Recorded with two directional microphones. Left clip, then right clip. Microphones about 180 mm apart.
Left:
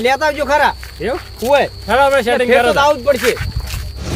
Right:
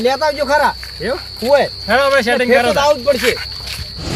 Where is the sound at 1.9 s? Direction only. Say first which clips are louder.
Left 1 dB; 55° left (ahead or behind).